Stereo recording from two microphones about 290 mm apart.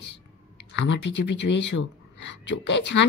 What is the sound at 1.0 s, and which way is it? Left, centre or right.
Speech, left.